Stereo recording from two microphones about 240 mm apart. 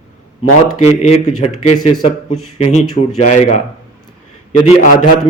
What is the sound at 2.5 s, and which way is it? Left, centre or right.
A man's voice, left.